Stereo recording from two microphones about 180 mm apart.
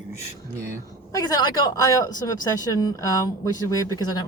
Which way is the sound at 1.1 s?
20° left (ahead or behind).